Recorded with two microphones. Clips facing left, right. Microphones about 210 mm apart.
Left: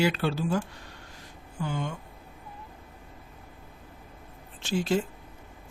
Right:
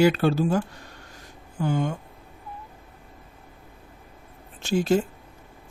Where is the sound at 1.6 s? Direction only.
45° right (ahead or behind).